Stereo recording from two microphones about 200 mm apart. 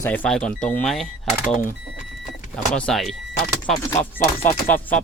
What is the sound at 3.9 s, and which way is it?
Speech, 40° left (ahead or behind).